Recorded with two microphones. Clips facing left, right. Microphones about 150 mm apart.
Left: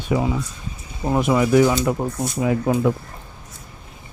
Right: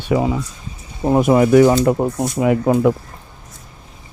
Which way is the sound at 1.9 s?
50° right (ahead or behind).